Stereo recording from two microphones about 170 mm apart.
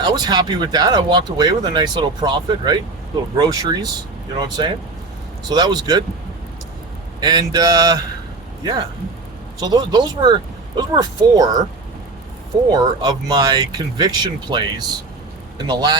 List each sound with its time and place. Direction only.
0.0 s speech: 25° right (ahead or behind)
7.2 s speech: 25° right (ahead or behind)
9.6 s speech: 25° right (ahead or behind)
12.7 s speech: 25° right (ahead or behind)